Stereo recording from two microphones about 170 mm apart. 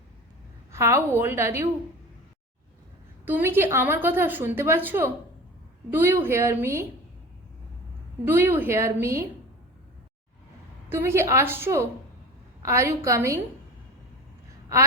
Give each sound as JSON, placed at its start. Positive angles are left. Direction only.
{"t": 0.7, "sound": "a woman's voice", "side_deg": -15}
{"t": 3.2, "sound": "a woman's voice", "side_deg": -10}
{"t": 8.3, "sound": "a woman's voice", "side_deg": -10}
{"t": 10.8, "sound": "a woman's voice", "side_deg": -15}